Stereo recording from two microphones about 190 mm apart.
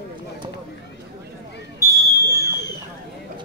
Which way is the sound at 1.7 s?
15° left (ahead or behind).